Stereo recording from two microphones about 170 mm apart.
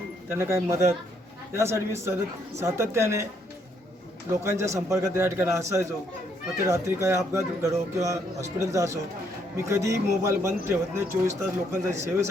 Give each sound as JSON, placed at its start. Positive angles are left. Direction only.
{"t": 0.3, "sound": "speech", "side_deg": -15}
{"t": 4.4, "sound": "speech", "side_deg": -15}